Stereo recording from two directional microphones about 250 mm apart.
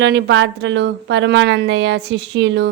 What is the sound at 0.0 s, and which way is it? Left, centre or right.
A woman's voice, right.